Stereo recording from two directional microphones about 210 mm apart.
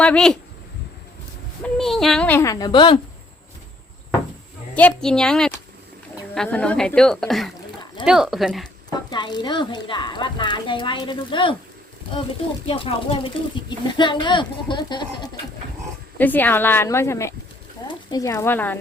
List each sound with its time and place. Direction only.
0.0 s a woman's voice: 5° left (ahead or behind)
1.6 s speech: centre (ahead or behind); by 3.0 s 25° left (ahead or behind)
4.7 s a woman's voice: 5° left (ahead or behind)
8.9 s speech: 20° left (ahead or behind)
12.6 s speech: 25° left (ahead or behind)
16.1 s speech: 10° left (ahead or behind)